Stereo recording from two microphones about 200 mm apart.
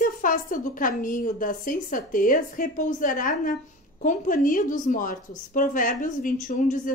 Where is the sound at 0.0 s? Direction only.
40° left (ahead or behind).